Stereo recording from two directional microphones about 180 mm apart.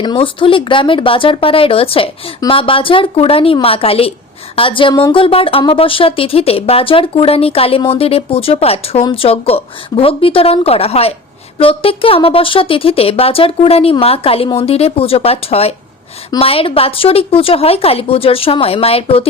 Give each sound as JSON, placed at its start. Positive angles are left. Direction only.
{"t": 0.0, "sound": "speech", "side_deg": 25}